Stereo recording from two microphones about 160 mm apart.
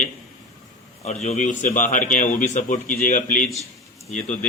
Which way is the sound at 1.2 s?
50° left (ahead or behind).